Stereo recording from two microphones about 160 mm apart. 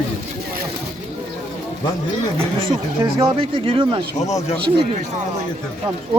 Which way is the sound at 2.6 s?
30° right (ahead or behind).